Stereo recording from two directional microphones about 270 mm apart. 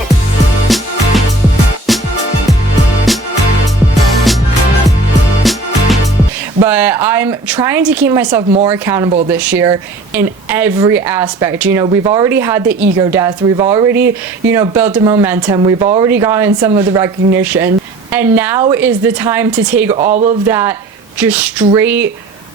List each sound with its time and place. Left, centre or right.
0.7 s music: centre
1.9 s music: centre
3.1 s music: centre
5.4 s music: centre
6.6 s speech: centre
9.0 s speech: centre
9.3 s speech: centre